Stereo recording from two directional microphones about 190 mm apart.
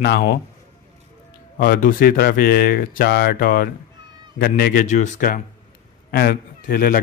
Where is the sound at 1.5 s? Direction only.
50° left (ahead or behind).